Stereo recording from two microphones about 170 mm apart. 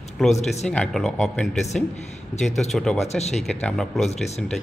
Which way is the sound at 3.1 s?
40° left (ahead or behind).